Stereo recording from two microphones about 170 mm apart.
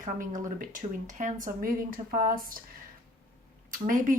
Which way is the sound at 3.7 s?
50° right (ahead or behind).